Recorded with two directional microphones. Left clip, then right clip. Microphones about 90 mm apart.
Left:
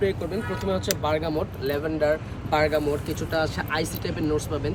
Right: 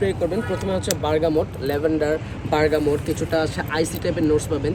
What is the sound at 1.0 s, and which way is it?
Speech, 35° left (ahead or behind).